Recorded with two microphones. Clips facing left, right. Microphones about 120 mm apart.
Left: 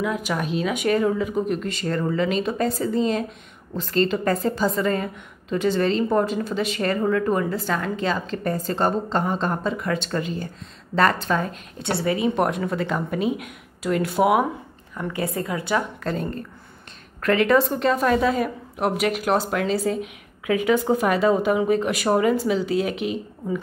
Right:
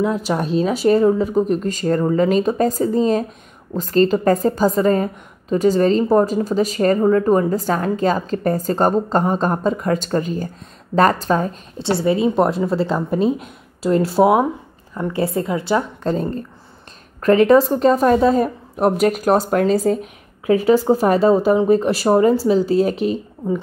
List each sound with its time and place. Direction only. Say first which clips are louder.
0.3 s a woman's voice: right 6 dB; 35° right (ahead or behind)
12.0 s a woman's voice: right 5 dB; 25° right (ahead or behind)